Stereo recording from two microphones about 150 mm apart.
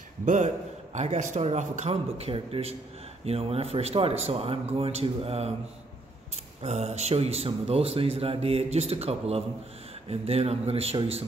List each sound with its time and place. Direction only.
0.2 s a man's voice: 55° right (ahead or behind)
6.6 s speech: 45° right (ahead or behind)